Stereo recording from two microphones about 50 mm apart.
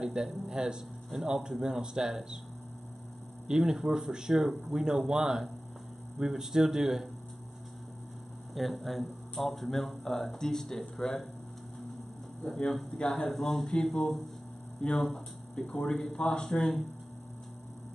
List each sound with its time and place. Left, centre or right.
0.0 s speech: centre
3.4 s speech: centre
8.5 s speech: centre
12.9 s speech: centre
13.3 s speech: centre